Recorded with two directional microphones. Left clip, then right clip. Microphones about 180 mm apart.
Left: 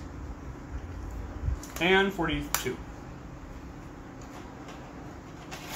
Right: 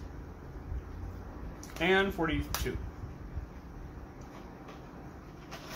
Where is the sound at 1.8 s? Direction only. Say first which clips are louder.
Left 3 dB; 25° right (ahead or behind).